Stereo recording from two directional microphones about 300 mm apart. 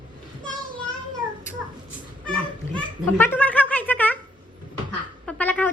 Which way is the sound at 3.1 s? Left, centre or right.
Centre.